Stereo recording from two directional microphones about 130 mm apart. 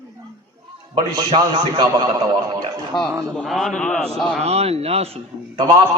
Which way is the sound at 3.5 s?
5° left (ahead or behind).